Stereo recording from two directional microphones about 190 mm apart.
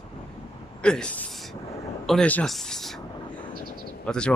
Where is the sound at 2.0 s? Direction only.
5° left (ahead or behind).